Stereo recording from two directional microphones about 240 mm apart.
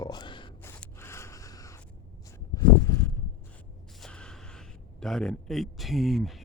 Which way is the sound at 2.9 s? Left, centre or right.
Centre.